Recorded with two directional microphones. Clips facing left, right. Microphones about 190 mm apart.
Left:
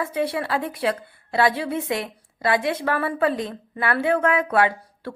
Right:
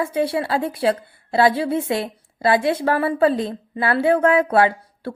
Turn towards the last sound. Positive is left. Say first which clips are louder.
# right 3 dB
turn(degrees=-30)  # may be behind; listen again after turning